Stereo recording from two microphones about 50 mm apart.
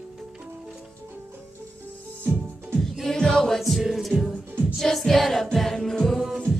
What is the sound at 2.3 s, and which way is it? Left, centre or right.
Music, right.